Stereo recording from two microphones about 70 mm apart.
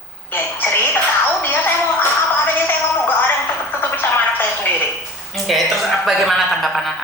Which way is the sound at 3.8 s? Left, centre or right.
Left.